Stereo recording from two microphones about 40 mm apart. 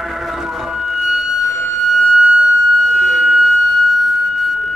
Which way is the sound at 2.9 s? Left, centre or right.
Centre.